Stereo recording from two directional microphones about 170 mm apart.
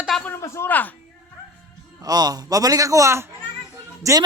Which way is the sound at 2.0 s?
20° right (ahead or behind).